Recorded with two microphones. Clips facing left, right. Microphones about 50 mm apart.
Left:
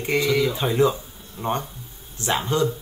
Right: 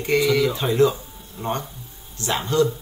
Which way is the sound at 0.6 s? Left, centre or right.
Centre.